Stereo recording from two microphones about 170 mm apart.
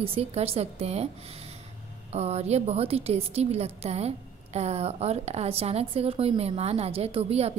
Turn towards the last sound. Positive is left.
turn(degrees=-35)  # may be behind; listen again after turning